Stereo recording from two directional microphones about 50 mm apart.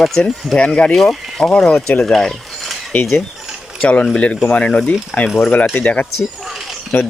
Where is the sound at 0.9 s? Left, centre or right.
Centre.